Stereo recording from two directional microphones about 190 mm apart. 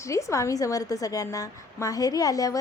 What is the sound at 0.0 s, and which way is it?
A woman's voice, 15° left (ahead or behind).